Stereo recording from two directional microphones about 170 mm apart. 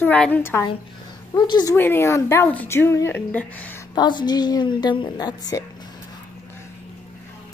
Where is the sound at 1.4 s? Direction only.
25° left (ahead or behind).